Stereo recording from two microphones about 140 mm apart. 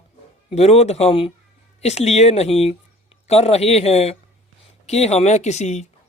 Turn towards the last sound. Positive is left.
turn(degrees=55)  # may be behind; listen again after turning